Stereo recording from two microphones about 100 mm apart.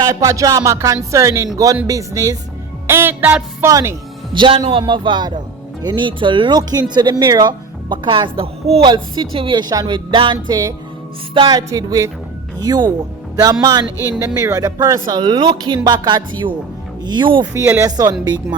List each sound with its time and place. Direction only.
0.1 s speech: 35° right (ahead or behind)
2.8 s music: 25° right (ahead or behind)
3.7 s speech: 35° right (ahead or behind)
4.4 s a man's voice: 60° right (ahead or behind)
4.7 s music: 55° right (ahead or behind); by 8.8 s 75° right (ahead or behind)
8.8 s music: 55° right (ahead or behind); by 10.8 s 40° right (ahead or behind)
11.3 s speech: 45° right (ahead or behind)
13.3 s music: 40° right (ahead or behind)
14.1 s speech: 30° right (ahead or behind)
15.0 s music: 50° right (ahead or behind)
17.7 s speech: 35° right (ahead or behind)